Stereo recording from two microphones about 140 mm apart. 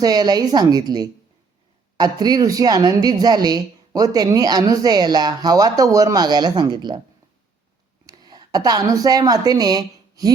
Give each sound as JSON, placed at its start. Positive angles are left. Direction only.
{"t": 0.0, "sound": "speech", "side_deg": -30}
{"t": 8.0, "sound": "a woman's voice", "side_deg": -30}